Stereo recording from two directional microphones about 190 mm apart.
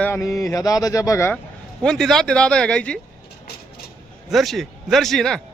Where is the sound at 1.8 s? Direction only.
5° left (ahead or behind).